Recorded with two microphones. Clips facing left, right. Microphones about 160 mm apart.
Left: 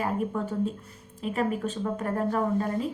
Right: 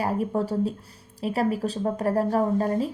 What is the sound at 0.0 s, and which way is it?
A woman's voice, 35° right (ahead or behind).